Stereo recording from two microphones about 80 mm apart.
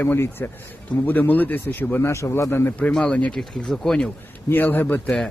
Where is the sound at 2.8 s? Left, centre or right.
Centre.